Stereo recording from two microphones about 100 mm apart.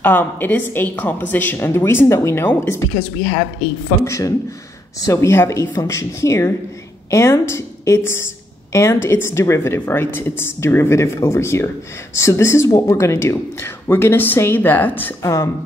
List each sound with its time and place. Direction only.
0.0 s a woman's voice: 20° left (ahead or behind)
4.0 s a woman's voice: 30° left (ahead or behind)
15.2 s a woman's voice: 30° left (ahead or behind)